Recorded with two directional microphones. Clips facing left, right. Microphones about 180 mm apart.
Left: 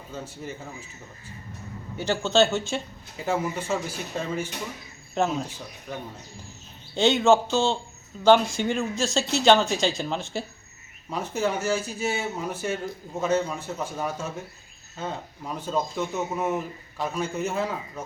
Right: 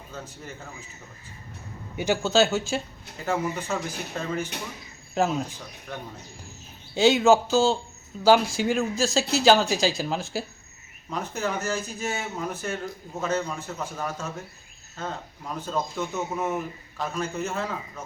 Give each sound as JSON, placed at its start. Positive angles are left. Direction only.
{"t": 0.1, "sound": "speech", "side_deg": 10}
{"t": 2.0, "sound": "speech", "side_deg": -5}
{"t": 5.1, "sound": "speech", "side_deg": 0}
{"t": 6.9, "sound": "speech", "side_deg": -5}
{"t": 11.1, "sound": "speech", "side_deg": 10}